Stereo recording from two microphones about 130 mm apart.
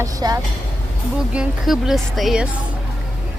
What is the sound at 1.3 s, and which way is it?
Speech, 5° right (ahead or behind).